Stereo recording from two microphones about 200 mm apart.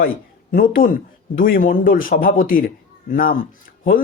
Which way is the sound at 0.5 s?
45° left (ahead or behind).